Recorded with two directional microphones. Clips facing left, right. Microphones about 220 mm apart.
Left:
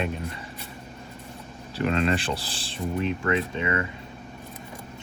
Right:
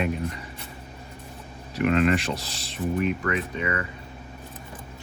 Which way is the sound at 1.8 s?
30° left (ahead or behind).